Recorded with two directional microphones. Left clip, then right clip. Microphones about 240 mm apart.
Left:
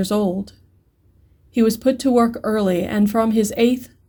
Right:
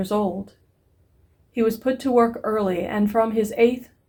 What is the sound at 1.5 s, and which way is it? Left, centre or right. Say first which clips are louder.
Speech: left 4 dB; left.